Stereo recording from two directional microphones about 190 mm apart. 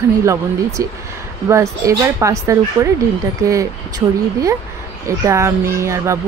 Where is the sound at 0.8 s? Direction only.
15° right (ahead or behind).